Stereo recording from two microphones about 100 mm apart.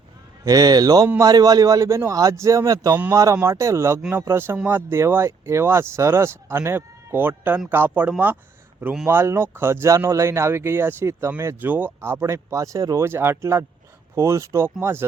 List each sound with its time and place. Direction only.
0.4 s a man's voice: 40° right (ahead or behind)
4.5 s speech: 15° right (ahead or behind)
4.9 s speech: 25° right (ahead or behind)
9.0 s speech: 25° right (ahead or behind)